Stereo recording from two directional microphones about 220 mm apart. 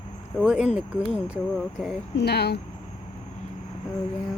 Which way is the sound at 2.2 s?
45° left (ahead or behind).